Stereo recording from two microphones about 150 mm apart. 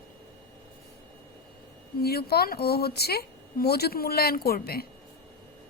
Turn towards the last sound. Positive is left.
turn(degrees=90)